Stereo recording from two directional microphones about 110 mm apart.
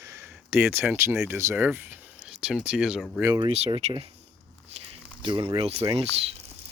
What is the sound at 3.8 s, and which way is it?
Speech, 80° right.